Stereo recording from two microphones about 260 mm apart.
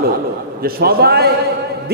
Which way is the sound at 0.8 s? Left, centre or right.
Right.